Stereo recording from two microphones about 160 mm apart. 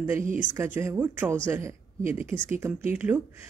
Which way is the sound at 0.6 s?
15° right (ahead or behind).